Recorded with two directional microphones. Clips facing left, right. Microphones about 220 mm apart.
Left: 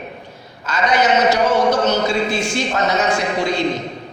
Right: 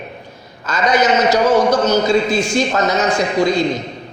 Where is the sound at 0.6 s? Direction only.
45° right (ahead or behind).